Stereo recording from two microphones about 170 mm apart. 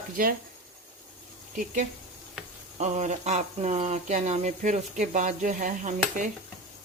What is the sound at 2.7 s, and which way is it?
Speech, 40° right (ahead or behind).